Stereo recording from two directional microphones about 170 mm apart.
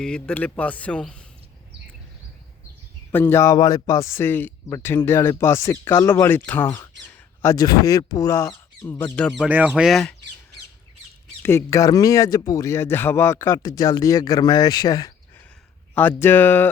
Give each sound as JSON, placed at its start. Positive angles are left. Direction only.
{"t": 0.0, "sound": "speech", "side_deg": 5}
{"t": 3.1, "sound": "speech", "side_deg": 15}
{"t": 9.4, "sound": "speech", "side_deg": -10}
{"t": 11.4, "sound": "speech", "side_deg": 15}
{"t": 16.2, "sound": "speech", "side_deg": 10}